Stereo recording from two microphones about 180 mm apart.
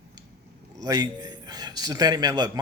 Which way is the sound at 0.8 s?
20° right (ahead or behind).